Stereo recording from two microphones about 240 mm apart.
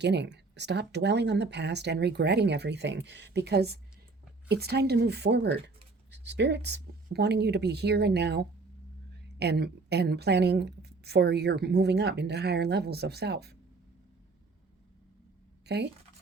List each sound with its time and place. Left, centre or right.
0.0 s a woman's voice: right
15.6 s speech: right